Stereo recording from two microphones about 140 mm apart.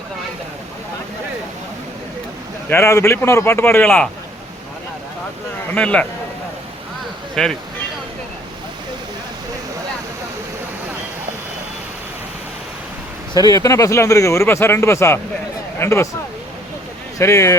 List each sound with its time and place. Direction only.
2.6 s speech: 20° left (ahead or behind)
5.7 s speech: 10° left (ahead or behind)
7.4 s speech: 5° left (ahead or behind)
13.3 s speech: 25° left (ahead or behind)
17.2 s speech: 20° left (ahead or behind)